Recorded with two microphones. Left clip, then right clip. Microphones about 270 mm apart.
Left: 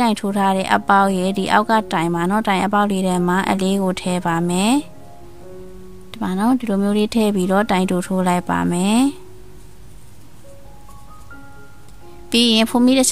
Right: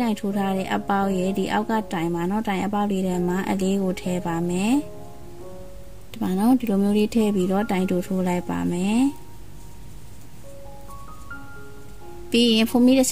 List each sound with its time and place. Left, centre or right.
0.0 s a woman's voice: left
6.1 s a woman's voice: left
12.3 s a woman's voice: left